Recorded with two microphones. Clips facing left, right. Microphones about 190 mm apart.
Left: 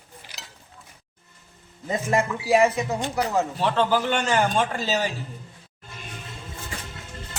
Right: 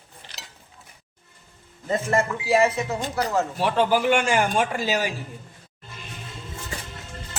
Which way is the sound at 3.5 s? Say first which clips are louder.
Right 3 dB; 10° right (ahead or behind).